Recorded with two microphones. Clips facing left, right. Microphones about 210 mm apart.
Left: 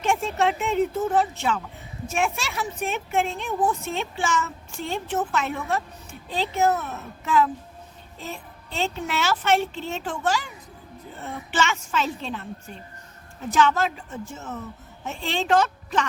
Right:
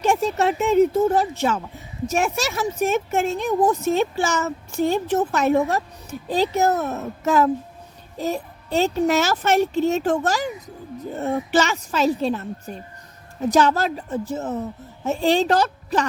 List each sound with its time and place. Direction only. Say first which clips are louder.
0.0 s a woman's voice: right 3 dB; 40° right (ahead or behind)